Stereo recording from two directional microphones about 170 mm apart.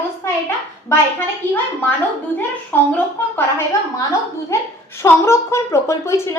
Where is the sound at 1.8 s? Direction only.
10° left (ahead or behind).